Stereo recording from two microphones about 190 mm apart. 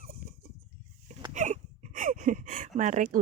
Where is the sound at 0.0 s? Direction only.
50° right (ahead or behind).